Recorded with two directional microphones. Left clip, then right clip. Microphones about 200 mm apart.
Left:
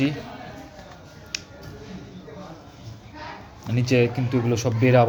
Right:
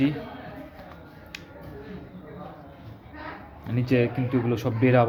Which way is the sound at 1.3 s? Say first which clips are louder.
Left 9 dB; 10° left (ahead or behind).